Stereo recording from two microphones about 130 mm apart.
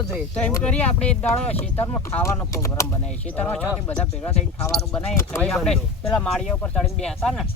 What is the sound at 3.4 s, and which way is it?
Speech, 10° left (ahead or behind).